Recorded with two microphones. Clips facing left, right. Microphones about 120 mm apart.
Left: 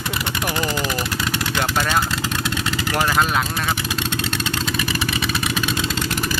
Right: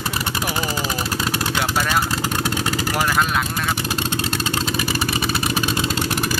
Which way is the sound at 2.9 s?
Centre (ahead or behind).